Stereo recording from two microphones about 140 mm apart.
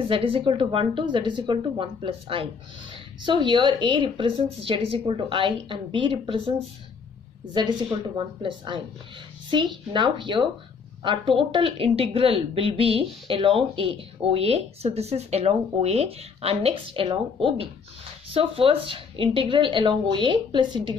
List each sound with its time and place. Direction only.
0.1 s speech: 40° right (ahead or behind)
7.5 s a woman's voice: 30° right (ahead or behind)